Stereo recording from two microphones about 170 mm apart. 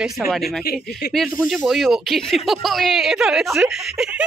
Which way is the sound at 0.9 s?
75° left (ahead or behind).